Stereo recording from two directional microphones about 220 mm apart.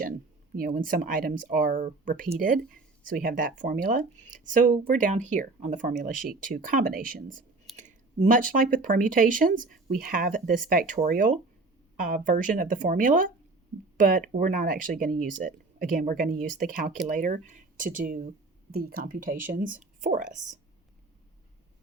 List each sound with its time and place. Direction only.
0.5 s speech: 40° right (ahead or behind)